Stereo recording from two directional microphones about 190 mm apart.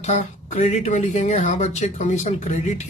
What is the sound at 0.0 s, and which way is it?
Speech, 35° left (ahead or behind).